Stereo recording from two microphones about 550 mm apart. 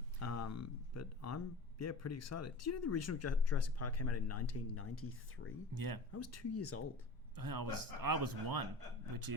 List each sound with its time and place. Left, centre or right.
0.2 s speech: left
5.7 s speech: right
6.1 s speech: left
7.3 s speech: right